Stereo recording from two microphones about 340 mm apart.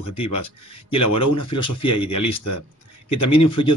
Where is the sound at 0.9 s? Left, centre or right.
Left.